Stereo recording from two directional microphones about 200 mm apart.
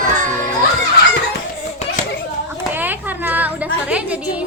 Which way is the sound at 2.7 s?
10° right (ahead or behind).